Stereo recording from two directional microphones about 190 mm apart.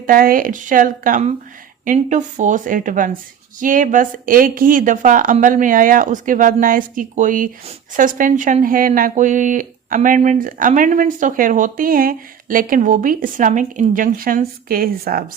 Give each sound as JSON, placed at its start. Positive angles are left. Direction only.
{"t": 0.0, "sound": "speech", "side_deg": -50}